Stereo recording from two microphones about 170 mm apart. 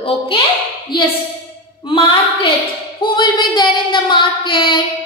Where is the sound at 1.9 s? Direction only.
30° left (ahead or behind).